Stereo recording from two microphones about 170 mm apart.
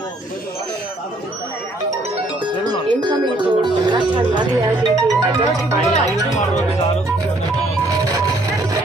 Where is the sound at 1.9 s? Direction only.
35° right (ahead or behind).